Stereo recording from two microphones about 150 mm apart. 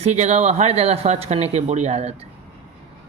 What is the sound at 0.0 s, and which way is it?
Speech, 50° right (ahead or behind).